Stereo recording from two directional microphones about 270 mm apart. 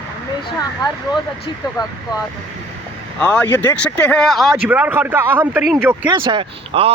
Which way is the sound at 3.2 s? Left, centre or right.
Centre.